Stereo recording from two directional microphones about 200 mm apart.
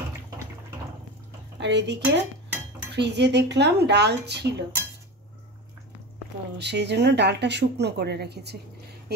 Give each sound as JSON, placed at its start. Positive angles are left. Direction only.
{"t": 1.6, "sound": "speech", "side_deg": -60}
{"t": 6.6, "sound": "speech", "side_deg": -60}